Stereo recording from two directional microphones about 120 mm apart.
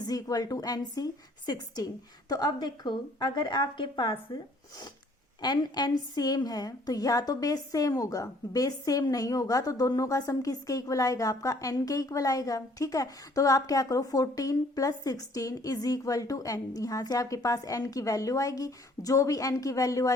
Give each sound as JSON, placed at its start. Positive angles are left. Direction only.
{"t": 0.0, "sound": "a woman's voice", "side_deg": 30}
{"t": 5.4, "sound": "a woman's voice", "side_deg": 35}